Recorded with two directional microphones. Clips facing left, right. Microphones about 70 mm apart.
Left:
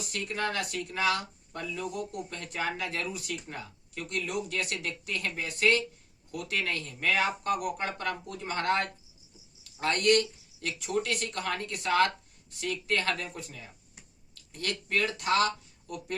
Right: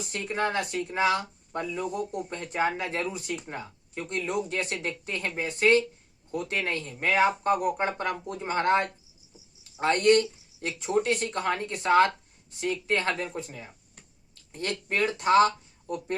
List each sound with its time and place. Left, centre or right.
0.0 s speech: right